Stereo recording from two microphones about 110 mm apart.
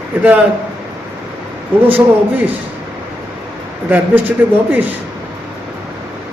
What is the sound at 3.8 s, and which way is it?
A man's voice, 15° right (ahead or behind).